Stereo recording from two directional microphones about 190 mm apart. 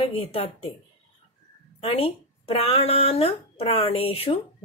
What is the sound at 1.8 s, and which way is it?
Speech, 30° left (ahead or behind).